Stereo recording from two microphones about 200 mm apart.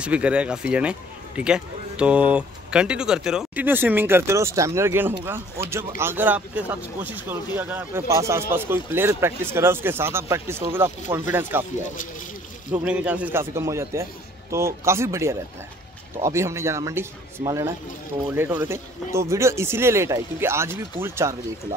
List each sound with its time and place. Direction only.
0.0 s speech: 5° right (ahead or behind)
12.8 s speech: 5° right (ahead or behind)